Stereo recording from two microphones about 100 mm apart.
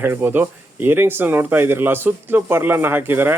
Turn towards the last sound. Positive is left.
turn(degrees=-20)  # may be behind; listen again after turning